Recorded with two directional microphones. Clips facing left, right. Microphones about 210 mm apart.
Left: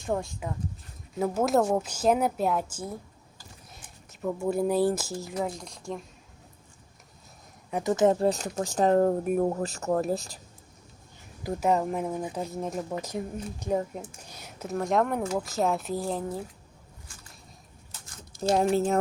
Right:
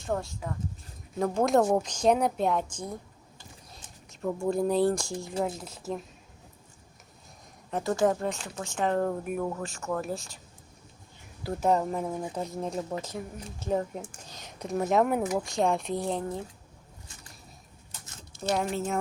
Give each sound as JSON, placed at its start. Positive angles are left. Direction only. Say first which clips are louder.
{"t": 0.1, "sound": "speech", "louder": "left 2 dB", "side_deg": 15}
{"t": 1.2, "sound": "a woman's voice", "louder": "even", "side_deg": 5}
{"t": 4.1, "sound": "a woman's voice", "louder": "even", "side_deg": 5}
{"t": 7.7, "sound": "speech", "louder": "left 3 dB", "side_deg": 15}
{"t": 11.4, "sound": "speech", "louder": "even", "side_deg": 10}
{"t": 14.3, "sound": "a sound", "louder": "even", "side_deg": 10}
{"t": 14.8, "sound": "a woman's voice", "louder": "right 1 dB", "side_deg": -5}
{"t": 15.2, "sound": "speech", "louder": "even", "side_deg": -15}
{"t": 15.4, "sound": "a woman's voice", "louder": "even", "side_deg": 5}
{"t": 18.0, "sound": "a sound", "louder": "left 3 dB", "side_deg": -25}
{"t": 18.5, "sound": "speech", "louder": "left 6 dB", "side_deg": 35}